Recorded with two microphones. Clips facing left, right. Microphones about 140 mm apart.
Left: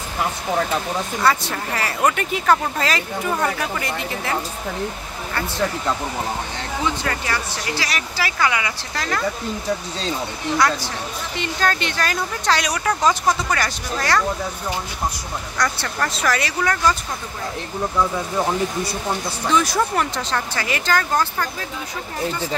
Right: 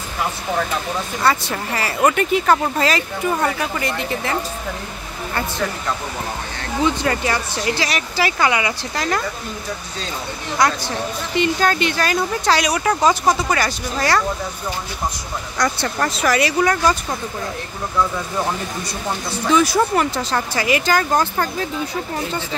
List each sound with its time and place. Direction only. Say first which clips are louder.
1.2 s speech: right 1 dB; 5° right (ahead or behind)
6.8 s speech: right 6 dB; 20° right (ahead or behind)
11.3 s speech: right 5 dB; 10° right (ahead or behind)
15.5 s speech: right 3 dB; 15° right (ahead or behind)
19.5 s speech: right 4 dB; 5° right (ahead or behind)